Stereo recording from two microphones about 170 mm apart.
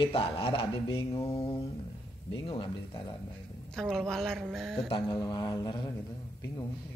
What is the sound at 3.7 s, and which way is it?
A woman's voice, 5° left (ahead or behind).